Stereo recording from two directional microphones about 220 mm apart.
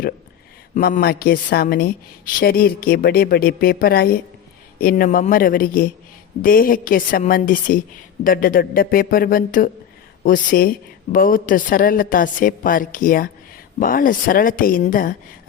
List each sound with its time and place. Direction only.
0.7 s a woman's voice: 40° left (ahead or behind)